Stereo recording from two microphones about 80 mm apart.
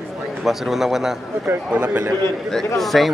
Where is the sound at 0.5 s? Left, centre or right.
Centre.